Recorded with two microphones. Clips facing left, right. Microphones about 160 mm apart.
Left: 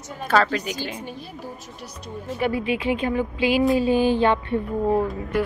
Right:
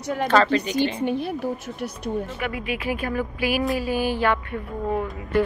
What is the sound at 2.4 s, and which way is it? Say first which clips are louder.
Speech: left 5 dB; 30° left (ahead or behind).